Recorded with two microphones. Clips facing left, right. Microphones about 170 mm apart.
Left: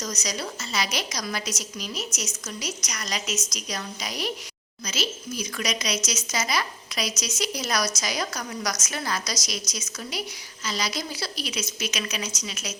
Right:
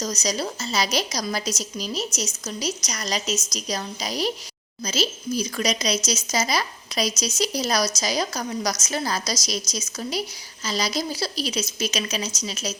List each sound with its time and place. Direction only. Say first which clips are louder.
0.0 s a woman's voice: right 5 dB; 30° right (ahead or behind)